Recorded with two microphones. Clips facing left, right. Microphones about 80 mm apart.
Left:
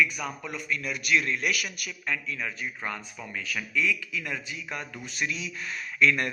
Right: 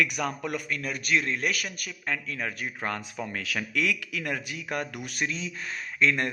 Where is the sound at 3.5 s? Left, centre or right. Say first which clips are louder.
Even; right.